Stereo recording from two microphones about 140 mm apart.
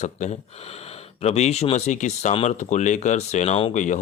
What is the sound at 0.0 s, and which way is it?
Speech, 55° left (ahead or behind).